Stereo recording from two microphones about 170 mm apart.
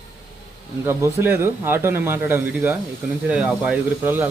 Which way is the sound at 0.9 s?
15° right (ahead or behind).